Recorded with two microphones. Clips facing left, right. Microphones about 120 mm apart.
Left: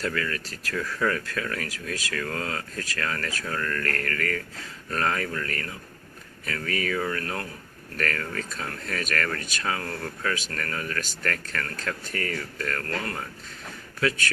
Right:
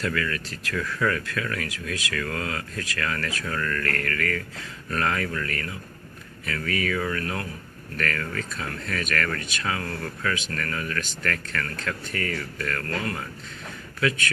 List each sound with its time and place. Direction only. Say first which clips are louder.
0.0 s speech: right 1 dB; 30° left (ahead or behind)
12.9 s speech: right 2 dB; 15° right (ahead or behind)
14.0 s speech: right 1 dB; 40° left (ahead or behind)